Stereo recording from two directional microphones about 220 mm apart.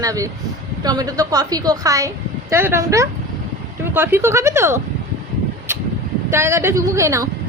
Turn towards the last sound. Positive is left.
turn(degrees=-15)  # may be behind; listen again after turning